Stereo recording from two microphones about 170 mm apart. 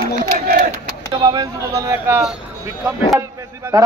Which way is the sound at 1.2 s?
20° right (ahead or behind).